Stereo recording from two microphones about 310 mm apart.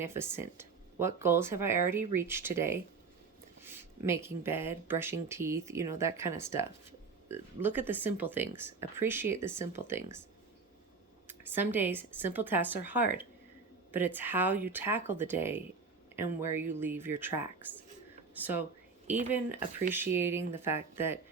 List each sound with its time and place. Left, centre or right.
0.0 s speech: centre
11.3 s speech: centre